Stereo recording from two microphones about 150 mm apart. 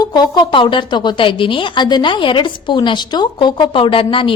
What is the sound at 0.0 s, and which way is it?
A woman's voice, 30° left (ahead or behind).